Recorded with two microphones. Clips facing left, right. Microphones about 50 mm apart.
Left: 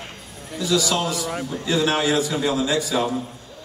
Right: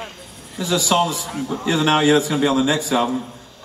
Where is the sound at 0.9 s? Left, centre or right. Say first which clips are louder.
Right 6 dB; right.